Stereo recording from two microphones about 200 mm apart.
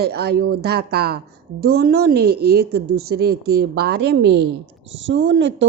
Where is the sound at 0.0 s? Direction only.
55° right (ahead or behind).